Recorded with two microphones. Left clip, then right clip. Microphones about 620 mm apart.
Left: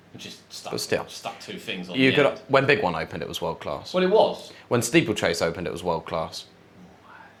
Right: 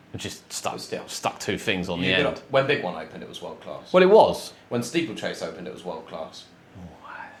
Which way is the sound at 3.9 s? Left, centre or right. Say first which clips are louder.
Right 5 dB; right.